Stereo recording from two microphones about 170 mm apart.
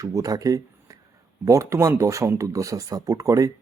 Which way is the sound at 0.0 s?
20° right (ahead or behind).